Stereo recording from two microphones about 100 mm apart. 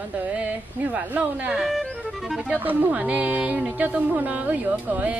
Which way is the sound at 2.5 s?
20° right (ahead or behind).